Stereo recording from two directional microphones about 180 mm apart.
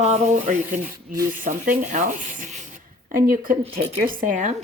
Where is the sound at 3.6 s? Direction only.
35° right (ahead or behind).